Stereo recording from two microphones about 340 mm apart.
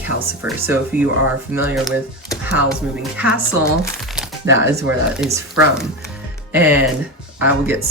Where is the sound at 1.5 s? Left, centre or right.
Centre.